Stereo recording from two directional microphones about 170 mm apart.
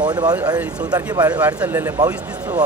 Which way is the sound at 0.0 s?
25° right (ahead or behind).